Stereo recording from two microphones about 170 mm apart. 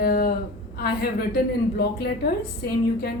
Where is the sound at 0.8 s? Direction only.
70° left (ahead or behind).